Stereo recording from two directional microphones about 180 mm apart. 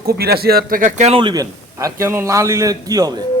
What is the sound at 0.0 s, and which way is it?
Speech, 60° right (ahead or behind).